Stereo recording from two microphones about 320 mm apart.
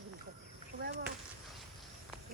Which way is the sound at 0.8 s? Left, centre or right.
Right.